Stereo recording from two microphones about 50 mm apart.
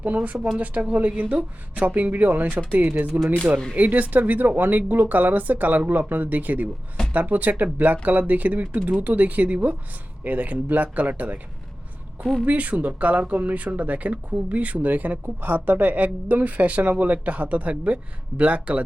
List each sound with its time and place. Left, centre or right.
0.0 s speech: right
12.5 s speech: right